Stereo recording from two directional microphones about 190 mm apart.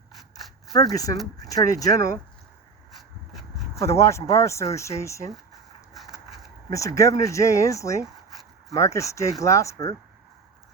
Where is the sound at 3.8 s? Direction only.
15° left (ahead or behind).